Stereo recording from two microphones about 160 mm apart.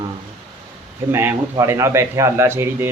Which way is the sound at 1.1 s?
15° right (ahead or behind).